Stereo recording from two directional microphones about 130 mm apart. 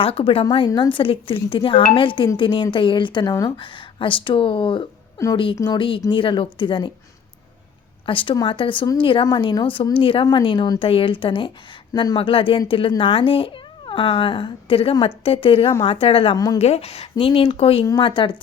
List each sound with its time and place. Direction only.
0.0 s speech: 45° left (ahead or behind)
3.6 s speech: 40° left (ahead or behind)
8.0 s speech: 40° left (ahead or behind)